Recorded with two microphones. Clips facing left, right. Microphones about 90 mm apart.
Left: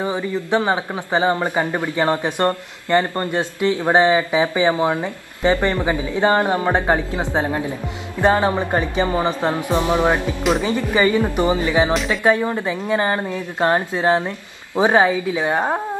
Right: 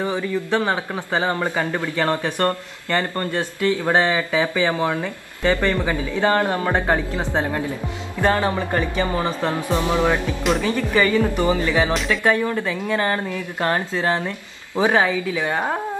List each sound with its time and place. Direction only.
0.0 s a man's voice: 20° left (ahead or behind)